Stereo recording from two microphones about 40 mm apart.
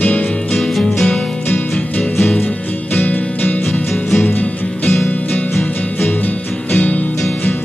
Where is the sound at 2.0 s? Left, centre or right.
Centre.